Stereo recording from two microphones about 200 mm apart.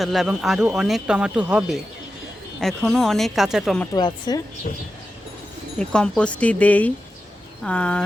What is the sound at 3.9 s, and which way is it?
Speech, 20° left (ahead or behind).